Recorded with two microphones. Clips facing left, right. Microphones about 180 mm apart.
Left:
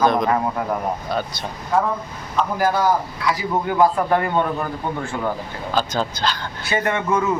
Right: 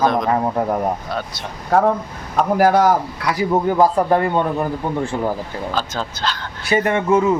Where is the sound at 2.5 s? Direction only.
75° right (ahead or behind).